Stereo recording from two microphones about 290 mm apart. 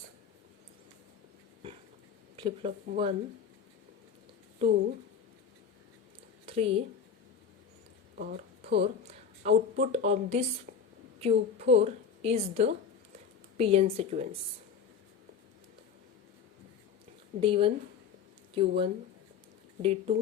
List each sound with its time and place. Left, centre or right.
2.3 s a woman's voice: centre
4.6 s a woman's voice: right
6.4 s a sound: centre
8.1 s speech: right
10.7 s a sound: right
11.2 s a woman's voice: right
17.4 s speech: centre
19.8 s a woman's voice: right